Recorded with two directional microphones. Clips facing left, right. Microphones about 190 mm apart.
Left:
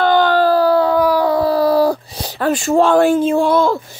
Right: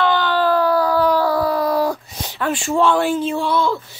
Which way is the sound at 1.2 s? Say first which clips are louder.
Left 4 dB; 25° left (ahead or behind).